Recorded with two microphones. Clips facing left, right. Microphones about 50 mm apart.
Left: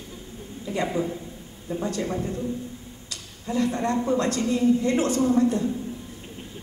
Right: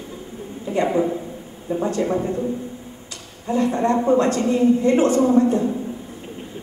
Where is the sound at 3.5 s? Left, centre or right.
Right.